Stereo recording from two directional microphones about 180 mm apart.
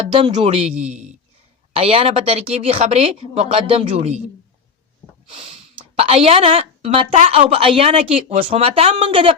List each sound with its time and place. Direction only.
0.1 s speech: 25° right (ahead or behind)
5.2 s speech: 30° right (ahead or behind)